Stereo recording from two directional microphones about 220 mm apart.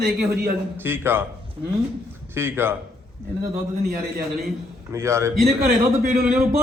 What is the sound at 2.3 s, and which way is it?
Speech, 10° right (ahead or behind).